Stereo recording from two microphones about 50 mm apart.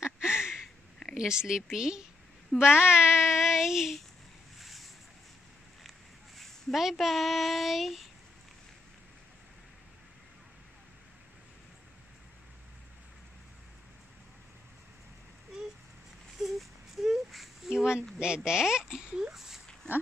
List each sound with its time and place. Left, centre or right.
0.0 s a sound: centre
1.1 s child singing: centre
2.5 s speech: centre
2.9 s child singing: centre
4.6 s boat: centre
5.9 s a child's voice: centre
16.3 s a sound: centre
17.6 s a sound: centre
18.2 s child singing: centre
19.3 s dog: centre